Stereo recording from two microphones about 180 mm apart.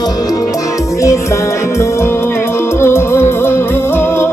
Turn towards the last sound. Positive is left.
turn(degrees=15)  # may be behind; listen again after turning